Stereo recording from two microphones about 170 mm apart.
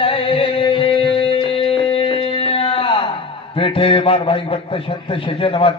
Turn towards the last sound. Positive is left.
turn(degrees=30)  # may be behind; listen again after turning